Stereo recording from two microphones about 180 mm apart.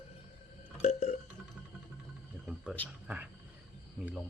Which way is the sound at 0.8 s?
35° left (ahead or behind).